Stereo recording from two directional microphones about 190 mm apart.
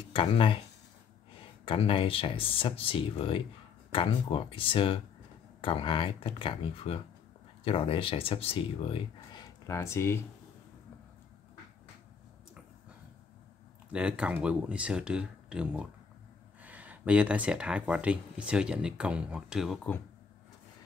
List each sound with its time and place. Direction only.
0.1 s speech: 30° left (ahead or behind)
1.7 s speech: 30° left (ahead or behind); by 10.2 s 15° left (ahead or behind)
13.9 s speech: 5° right (ahead or behind)